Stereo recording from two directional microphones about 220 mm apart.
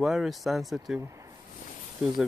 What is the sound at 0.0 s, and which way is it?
Speech, centre (ahead or behind).